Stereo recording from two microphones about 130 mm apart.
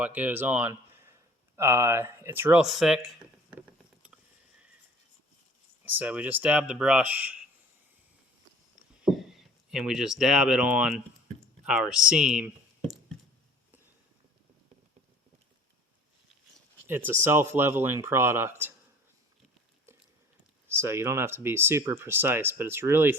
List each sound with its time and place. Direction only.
0.0 s speech: 10° right (ahead or behind)
2.6 s speech: 5° right (ahead or behind)
5.8 s speech: 10° right (ahead or behind)
9.0 s speech: 5° right (ahead or behind)
17.1 s speech: 20° right (ahead or behind)
20.7 s speech: 20° right (ahead or behind)